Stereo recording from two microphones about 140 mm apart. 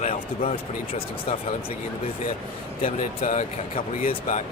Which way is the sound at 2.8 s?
65° left (ahead or behind).